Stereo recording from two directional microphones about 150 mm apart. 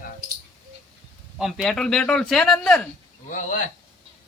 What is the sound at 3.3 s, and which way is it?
Speech, 60° left (ahead or behind).